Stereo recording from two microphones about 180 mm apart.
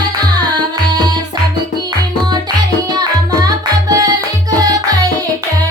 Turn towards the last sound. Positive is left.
turn(degrees=-20)  # may be behind; listen again after turning